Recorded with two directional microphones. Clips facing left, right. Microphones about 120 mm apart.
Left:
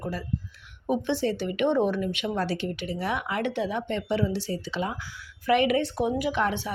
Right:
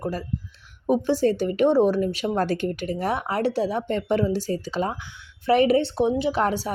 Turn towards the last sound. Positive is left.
turn(degrees=-40)  # may be behind; listen again after turning